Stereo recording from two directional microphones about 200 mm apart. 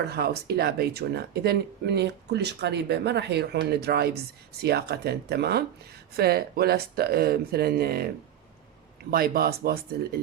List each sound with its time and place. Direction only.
0.0 s speech: 55° right (ahead or behind)